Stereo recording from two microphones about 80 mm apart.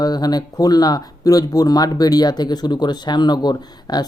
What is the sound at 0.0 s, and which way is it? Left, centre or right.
Speech, left.